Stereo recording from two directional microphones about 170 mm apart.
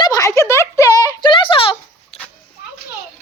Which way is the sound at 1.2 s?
30° left (ahead or behind).